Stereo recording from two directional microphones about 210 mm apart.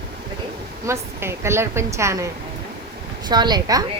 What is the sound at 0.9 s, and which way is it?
Speech, 10° right (ahead or behind).